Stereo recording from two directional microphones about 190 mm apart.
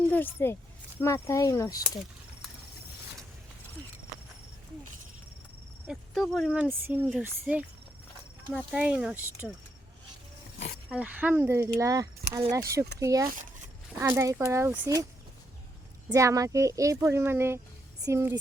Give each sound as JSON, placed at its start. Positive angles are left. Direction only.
{"t": 0.1, "sound": "speech", "side_deg": 10}
{"t": 5.9, "sound": "speech", "side_deg": 0}
{"t": 10.8, "sound": "speech", "side_deg": -5}
{"t": 16.0, "sound": "speech", "side_deg": -15}